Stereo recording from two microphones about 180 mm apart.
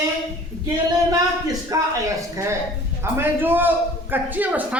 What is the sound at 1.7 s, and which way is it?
Speech, 20° right (ahead or behind).